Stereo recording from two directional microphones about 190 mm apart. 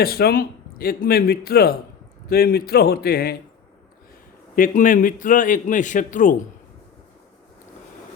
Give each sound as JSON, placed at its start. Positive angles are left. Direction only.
{"t": 0.0, "sound": "a man's voice", "side_deg": 55}
{"t": 4.5, "sound": "a man's voice", "side_deg": 45}